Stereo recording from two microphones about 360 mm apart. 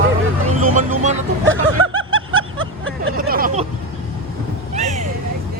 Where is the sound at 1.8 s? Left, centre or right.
Right.